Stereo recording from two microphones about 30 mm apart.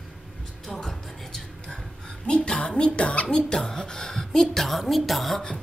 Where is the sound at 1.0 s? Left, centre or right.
Centre.